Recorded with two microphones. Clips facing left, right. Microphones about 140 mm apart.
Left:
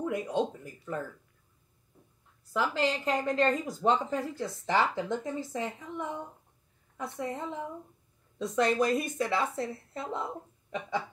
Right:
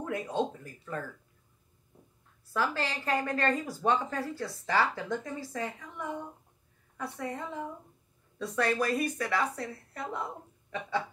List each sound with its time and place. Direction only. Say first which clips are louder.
0.0 s speech: left 2 dB; 15° left (ahead or behind)
2.5 s a woman's voice: left 3 dB; 20° left (ahead or behind)